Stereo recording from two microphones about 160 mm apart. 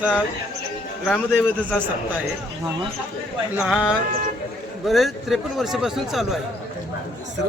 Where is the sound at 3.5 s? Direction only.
5° right (ahead or behind).